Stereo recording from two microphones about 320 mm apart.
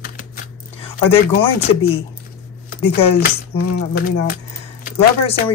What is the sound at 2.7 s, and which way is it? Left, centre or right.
Speech, left.